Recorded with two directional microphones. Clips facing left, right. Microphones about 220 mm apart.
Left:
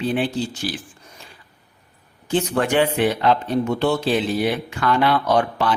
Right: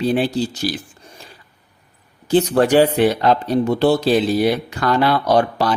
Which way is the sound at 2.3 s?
35° right (ahead or behind).